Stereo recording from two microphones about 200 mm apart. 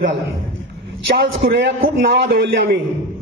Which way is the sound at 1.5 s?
60° right (ahead or behind).